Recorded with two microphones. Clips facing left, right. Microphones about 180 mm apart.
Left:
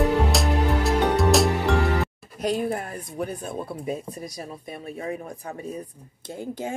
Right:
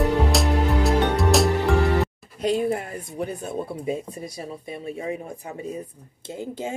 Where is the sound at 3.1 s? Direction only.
25° right (ahead or behind).